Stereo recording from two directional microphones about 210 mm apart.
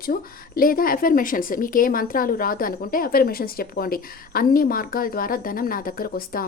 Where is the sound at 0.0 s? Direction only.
45° left (ahead or behind).